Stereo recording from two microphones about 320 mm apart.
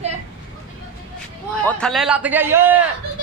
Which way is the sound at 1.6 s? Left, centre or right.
Centre.